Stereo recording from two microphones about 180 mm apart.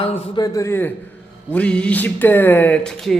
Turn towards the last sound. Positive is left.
turn(degrees=5)  # may be behind; listen again after turning